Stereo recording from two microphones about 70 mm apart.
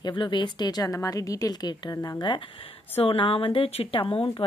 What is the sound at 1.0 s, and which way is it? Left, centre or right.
Speech, left.